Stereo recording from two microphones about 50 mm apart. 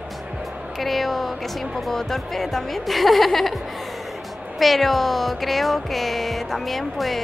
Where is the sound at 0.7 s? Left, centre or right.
Centre.